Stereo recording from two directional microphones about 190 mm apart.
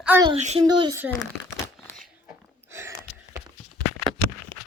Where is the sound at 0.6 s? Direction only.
20° right (ahead or behind).